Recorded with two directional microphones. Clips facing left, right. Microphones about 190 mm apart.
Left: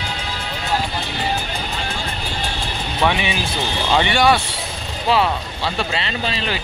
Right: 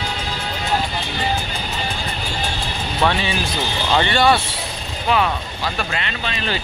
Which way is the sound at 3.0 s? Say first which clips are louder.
Even; 15° left (ahead or behind).